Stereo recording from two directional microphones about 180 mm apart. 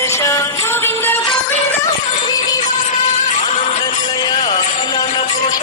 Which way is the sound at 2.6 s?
45° left (ahead or behind).